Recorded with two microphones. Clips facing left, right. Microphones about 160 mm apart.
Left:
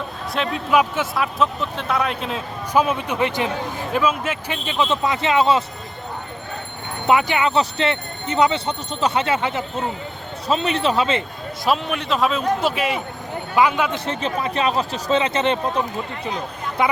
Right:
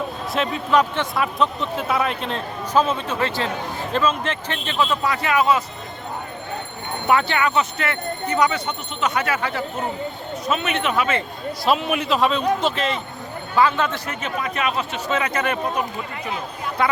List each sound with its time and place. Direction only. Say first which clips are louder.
0.3 s speech: even; centre (ahead or behind)
4.9 s speech: left 2 dB; 25° left (ahead or behind)
7.1 s speech: left 1 dB; 15° left (ahead or behind)
7.5 s speech: left 3 dB; 30° left (ahead or behind)
10.4 s speech: left 3 dB; 30° left (ahead or behind)
11.6 s speech: right 1 dB; 5° right (ahead or behind); by 14.0 s 15° left (ahead or behind)
14.0 s speech: left 3 dB; 30° left (ahead or behind)
16.8 s speech: left 1 dB; 20° left (ahead or behind)